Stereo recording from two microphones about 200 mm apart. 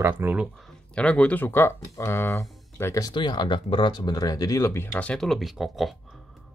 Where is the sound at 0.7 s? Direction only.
5° left (ahead or behind).